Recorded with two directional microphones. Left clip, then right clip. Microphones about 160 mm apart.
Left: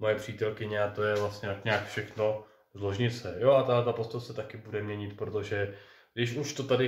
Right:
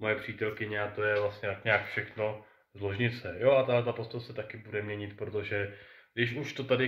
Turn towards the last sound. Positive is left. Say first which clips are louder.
# left 1 dB
turn(degrees=-15)  # may be behind; listen again after turning